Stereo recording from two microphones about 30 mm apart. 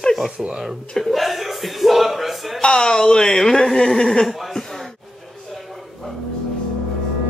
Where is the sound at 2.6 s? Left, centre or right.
Left.